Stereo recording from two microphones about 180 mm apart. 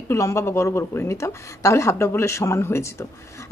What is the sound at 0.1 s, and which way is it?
A woman's voice, 15° left (ahead or behind).